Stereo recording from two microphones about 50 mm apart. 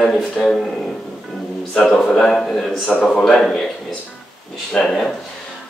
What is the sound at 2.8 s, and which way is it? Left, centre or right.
Speech, left.